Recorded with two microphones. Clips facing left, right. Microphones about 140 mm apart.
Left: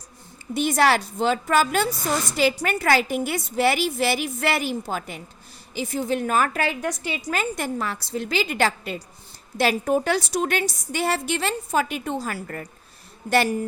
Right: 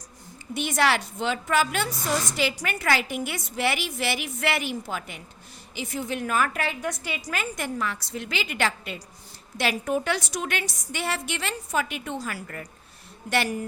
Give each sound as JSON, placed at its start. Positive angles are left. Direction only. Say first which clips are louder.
{"t": 0.5, "sound": "a woman's voice", "louder": "left 4 dB", "side_deg": 40}
{"t": 7.0, "sound": "a woman's voice", "louder": "left 5 dB", "side_deg": 25}